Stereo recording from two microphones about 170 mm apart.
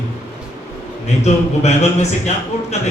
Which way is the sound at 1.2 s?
40° left (ahead or behind).